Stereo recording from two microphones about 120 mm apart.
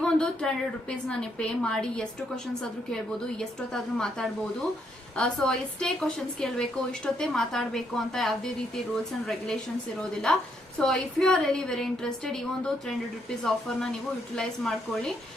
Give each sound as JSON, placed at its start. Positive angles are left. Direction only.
{"t": 0.0, "sound": "a woman's voice", "side_deg": 5}
{"t": 10.0, "sound": "a woman's voice", "side_deg": 5}